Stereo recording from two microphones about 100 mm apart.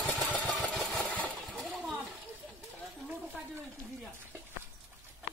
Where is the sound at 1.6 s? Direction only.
5° right (ahead or behind).